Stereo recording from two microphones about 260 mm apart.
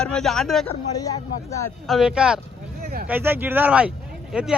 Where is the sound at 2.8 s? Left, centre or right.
Right.